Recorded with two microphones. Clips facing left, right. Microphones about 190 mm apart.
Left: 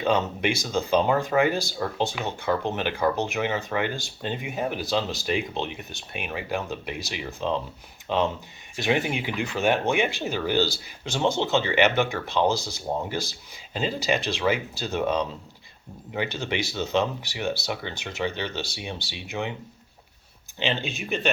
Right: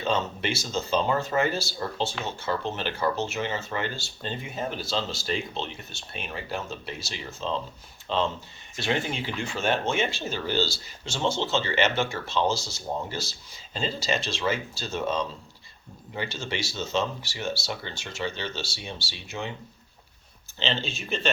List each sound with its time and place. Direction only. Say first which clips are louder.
0.0 s speech: left 4 dB; 15° left (ahead or behind)
20.6 s speech: left 2 dB; 15° left (ahead or behind)